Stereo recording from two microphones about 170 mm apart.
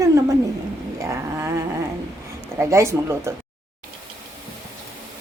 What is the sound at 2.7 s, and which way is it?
Speech, 15° right (ahead or behind).